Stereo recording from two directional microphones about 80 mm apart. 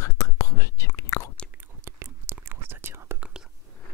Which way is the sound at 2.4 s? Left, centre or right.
Right.